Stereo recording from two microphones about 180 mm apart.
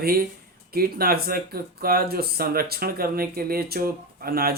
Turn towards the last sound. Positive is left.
turn(degrees=-55)  # may be behind; listen again after turning